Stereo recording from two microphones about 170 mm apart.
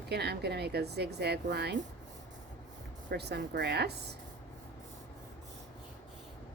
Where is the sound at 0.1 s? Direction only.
75° right (ahead or behind).